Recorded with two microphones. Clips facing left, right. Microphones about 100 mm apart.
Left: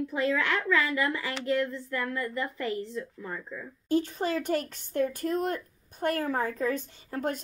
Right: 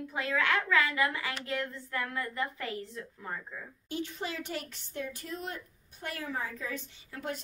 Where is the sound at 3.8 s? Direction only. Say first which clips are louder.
Left 10 dB; 40° left (ahead or behind).